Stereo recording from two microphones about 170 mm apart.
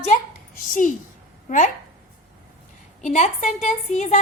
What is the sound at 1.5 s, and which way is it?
Speech, 50° left (ahead or behind).